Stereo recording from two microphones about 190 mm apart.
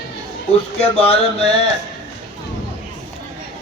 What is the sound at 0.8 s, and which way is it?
Speech, 30° left (ahead or behind).